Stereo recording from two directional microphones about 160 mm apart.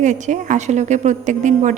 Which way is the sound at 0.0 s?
50° right (ahead or behind).